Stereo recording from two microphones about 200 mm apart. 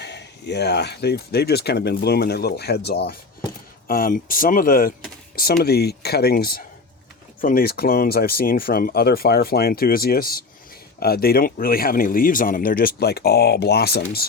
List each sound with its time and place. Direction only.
0.0 s speech: 55° left (ahead or behind)